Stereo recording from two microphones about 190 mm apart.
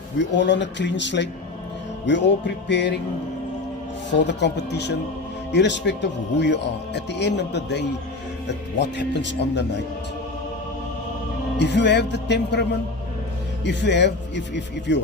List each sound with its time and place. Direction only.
0.2 s speech: 70° left (ahead or behind)
4.1 s speech: 65° left (ahead or behind)
11.5 s speech: 65° left (ahead or behind)
13.7 s speech: 65° left (ahead or behind)